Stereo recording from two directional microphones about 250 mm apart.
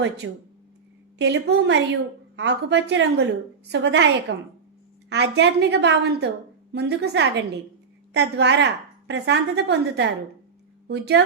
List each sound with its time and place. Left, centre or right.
0.2 s a woman's voice: right